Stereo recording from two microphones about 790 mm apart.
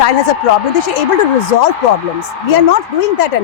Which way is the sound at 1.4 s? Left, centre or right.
Left.